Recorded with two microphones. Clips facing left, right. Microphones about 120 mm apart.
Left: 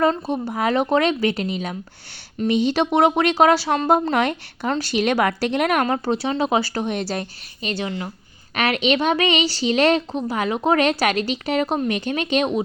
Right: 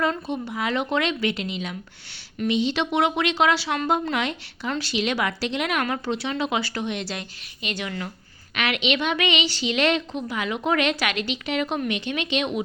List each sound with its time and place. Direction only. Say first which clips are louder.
0.0 s speech: left 5 dB; 35° left (ahead or behind)
8.5 s speech: left 5 dB; 40° left (ahead or behind)